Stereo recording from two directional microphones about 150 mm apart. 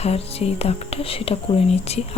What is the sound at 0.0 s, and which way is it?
Speech, 45° left (ahead or behind).